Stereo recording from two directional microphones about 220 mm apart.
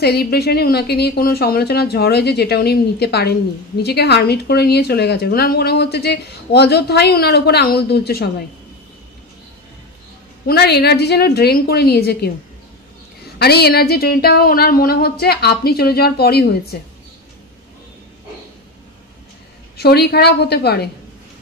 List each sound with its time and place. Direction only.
0.0 s speech: 45° left (ahead or behind)
10.4 s speech: 45° left (ahead or behind)
13.4 s speech: 45° left (ahead or behind)
19.8 s speech: 45° left (ahead or behind)